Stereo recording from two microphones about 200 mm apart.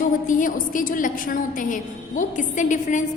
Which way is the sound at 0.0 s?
40° left (ahead or behind).